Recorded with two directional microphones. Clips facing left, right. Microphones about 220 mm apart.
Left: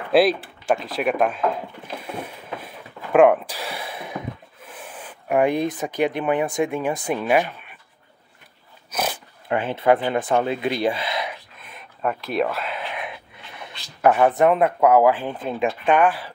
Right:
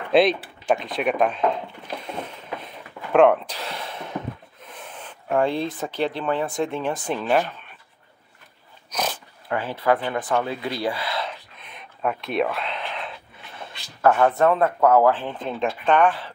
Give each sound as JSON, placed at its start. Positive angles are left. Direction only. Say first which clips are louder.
{"t": 0.1, "sound": "speech", "louder": "left 1 dB", "side_deg": 5}
{"t": 2.0, "sound": "a sound", "louder": "left 2 dB", "side_deg": 10}
{"t": 4.6, "sound": "speech", "louder": "left 1 dB", "side_deg": 10}
{"t": 8.9, "sound": "dog", "louder": "left 1 dB", "side_deg": 10}
{"t": 9.5, "sound": "speech", "louder": "left 3 dB", "side_deg": 20}
{"t": 11.7, "sound": "speech", "louder": "left 1 dB", "side_deg": 0}